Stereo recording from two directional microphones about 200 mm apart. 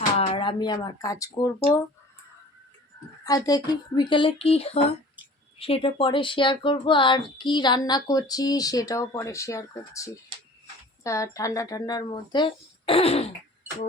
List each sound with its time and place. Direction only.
0.2 s speech: 25° left (ahead or behind)
3.2 s speech: 20° left (ahead or behind)